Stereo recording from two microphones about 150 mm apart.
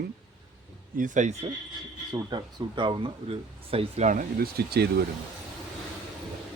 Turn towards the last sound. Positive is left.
turn(degrees=-90)